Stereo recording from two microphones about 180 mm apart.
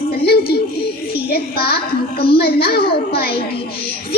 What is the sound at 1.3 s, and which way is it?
A child's voice, 60° left (ahead or behind).